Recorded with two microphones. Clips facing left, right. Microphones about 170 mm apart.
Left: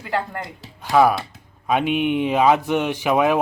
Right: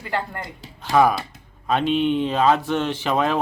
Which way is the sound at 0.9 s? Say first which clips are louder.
Left 1 dB; 5° left (ahead or behind).